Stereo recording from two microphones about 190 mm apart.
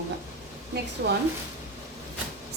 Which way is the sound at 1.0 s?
65° right (ahead or behind).